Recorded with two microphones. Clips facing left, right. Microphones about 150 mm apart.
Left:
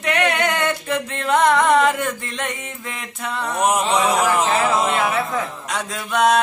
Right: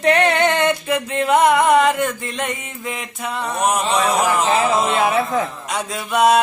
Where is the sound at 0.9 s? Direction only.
10° right (ahead or behind).